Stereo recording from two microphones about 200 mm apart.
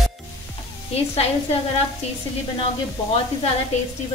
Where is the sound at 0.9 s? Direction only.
30° left (ahead or behind).